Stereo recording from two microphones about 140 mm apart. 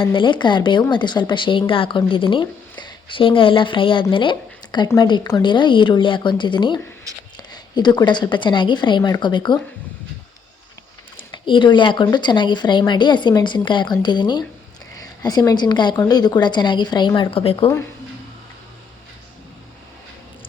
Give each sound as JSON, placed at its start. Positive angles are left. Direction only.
{"t": 0.0, "sound": "a woman's voice", "side_deg": 35}
{"t": 11.3, "sound": "a woman's voice", "side_deg": 35}